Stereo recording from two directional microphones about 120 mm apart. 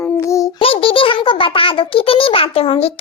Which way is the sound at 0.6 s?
50° left (ahead or behind).